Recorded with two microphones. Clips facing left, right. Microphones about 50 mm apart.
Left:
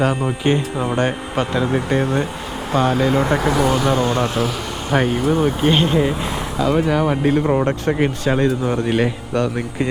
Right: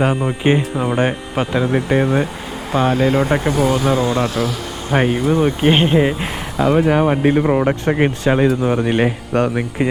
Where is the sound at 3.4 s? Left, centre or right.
Left.